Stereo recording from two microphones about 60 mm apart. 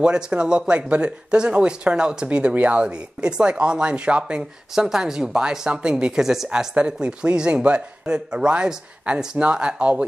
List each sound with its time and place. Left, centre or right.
0.0 s speech: centre
6.7 s speech: centre